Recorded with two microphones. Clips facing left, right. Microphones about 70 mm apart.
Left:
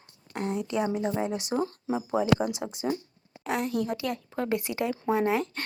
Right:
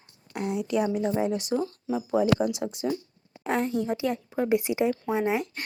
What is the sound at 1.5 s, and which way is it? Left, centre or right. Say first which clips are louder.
Speech: right 1 dB; left.